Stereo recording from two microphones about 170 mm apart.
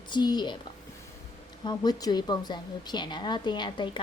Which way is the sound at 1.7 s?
25° left (ahead or behind).